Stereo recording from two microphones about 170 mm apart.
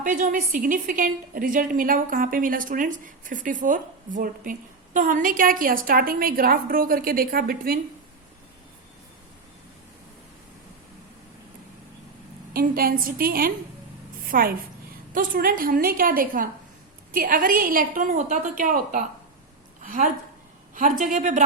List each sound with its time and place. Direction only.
0.0 s a woman's voice: 50° right (ahead or behind)
12.5 s a woman's voice: 60° right (ahead or behind)